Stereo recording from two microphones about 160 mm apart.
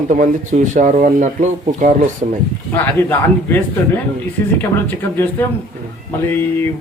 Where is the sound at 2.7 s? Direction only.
10° left (ahead or behind).